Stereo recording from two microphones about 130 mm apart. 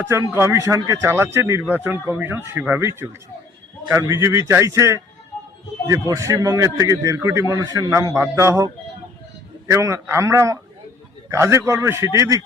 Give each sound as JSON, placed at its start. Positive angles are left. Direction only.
{"t": 0.1, "sound": "a man's voice", "side_deg": -20}
{"t": 9.6, "sound": "a man's voice", "side_deg": -20}